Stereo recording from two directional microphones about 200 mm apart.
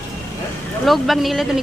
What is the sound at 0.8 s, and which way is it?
Speech, centre (ahead or behind).